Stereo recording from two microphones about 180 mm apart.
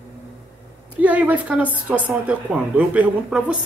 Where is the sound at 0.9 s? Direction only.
10° right (ahead or behind).